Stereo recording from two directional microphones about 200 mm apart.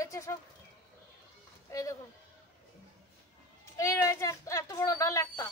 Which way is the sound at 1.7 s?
15° left (ahead or behind).